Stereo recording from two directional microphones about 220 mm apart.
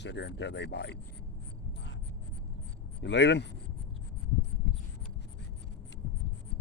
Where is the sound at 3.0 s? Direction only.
50° left (ahead or behind).